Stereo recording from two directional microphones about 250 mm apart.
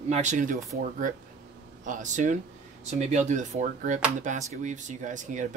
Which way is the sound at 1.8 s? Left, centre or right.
Right.